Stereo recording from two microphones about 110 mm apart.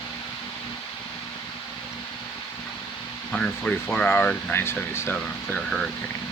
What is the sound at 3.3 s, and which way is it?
Speech, 10° left (ahead or behind).